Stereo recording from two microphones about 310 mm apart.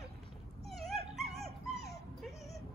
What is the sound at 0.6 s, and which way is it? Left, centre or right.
Dog, centre.